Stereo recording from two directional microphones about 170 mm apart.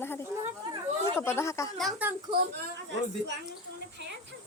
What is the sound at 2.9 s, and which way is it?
A woman's voice, 90° right.